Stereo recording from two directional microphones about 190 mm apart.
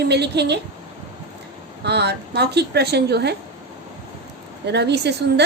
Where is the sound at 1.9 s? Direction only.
60° right (ahead or behind).